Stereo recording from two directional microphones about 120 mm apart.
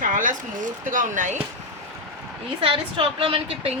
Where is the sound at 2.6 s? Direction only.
50° right (ahead or behind).